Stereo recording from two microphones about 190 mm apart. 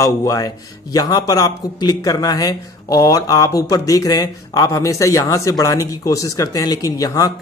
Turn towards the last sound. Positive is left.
turn(degrees=20)  # may be behind; listen again after turning